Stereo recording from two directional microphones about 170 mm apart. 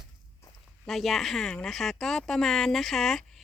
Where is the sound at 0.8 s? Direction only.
Centre (ahead or behind).